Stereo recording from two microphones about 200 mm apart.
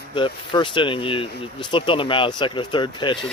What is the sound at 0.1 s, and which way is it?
Speech, 25° left (ahead or behind).